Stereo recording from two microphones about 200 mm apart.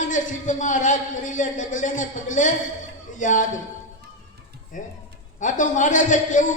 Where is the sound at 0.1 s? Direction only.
40° left (ahead or behind).